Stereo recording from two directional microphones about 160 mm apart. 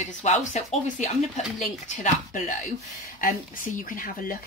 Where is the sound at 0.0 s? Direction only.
45° left (ahead or behind).